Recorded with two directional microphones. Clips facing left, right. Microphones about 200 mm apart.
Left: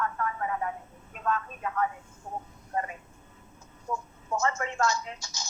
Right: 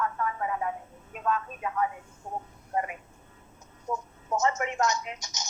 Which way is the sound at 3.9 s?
20° right (ahead or behind).